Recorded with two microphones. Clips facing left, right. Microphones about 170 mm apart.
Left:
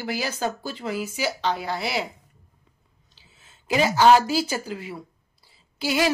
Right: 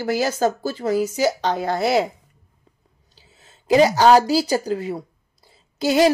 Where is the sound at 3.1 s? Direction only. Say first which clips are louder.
Right 5 dB; 40° right (ahead or behind).